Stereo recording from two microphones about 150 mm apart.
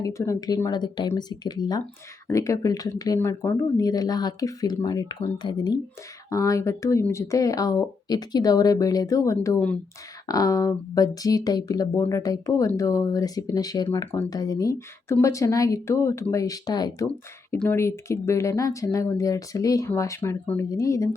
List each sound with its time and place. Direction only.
0.0 s speech: 20° left (ahead or behind)
17.5 s speech: 15° left (ahead or behind)